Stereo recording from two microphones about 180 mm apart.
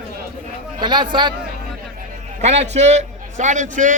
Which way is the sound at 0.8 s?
25° right (ahead or behind).